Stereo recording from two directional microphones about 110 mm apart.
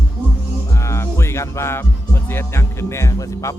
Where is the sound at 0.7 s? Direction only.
25° left (ahead or behind).